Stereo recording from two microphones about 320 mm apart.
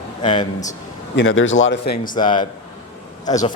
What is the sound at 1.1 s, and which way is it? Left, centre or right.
Speech, left.